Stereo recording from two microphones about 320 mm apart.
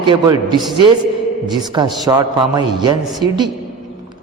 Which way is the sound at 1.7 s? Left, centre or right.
Centre.